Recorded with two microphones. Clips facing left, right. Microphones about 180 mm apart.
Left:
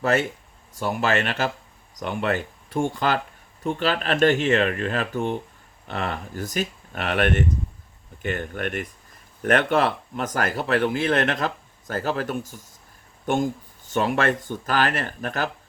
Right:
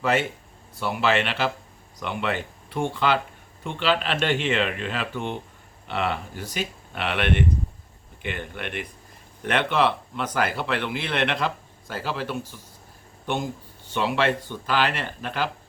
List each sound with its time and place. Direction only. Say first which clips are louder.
0.0 s speech: left 1 dB; 45° left (ahead or behind)